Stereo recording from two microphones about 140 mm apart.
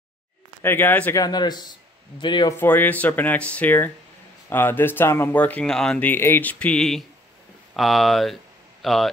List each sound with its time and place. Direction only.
0.6 s speech: 15° left (ahead or behind)
1.2 s speech: 30° left (ahead or behind)
2.5 s speech: 15° left (ahead or behind)